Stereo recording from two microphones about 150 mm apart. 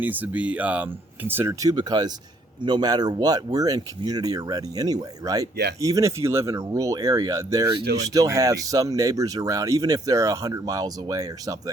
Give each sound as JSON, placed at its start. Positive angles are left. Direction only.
{"t": 0.0, "sound": "speech", "side_deg": -10}